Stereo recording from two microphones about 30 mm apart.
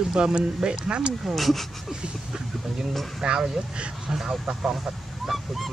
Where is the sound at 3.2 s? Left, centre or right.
Right.